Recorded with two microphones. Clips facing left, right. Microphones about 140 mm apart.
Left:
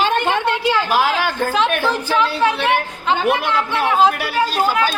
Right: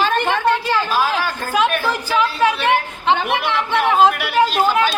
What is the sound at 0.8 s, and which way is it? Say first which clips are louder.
Speech: left 2 dB; 70° left (ahead or behind).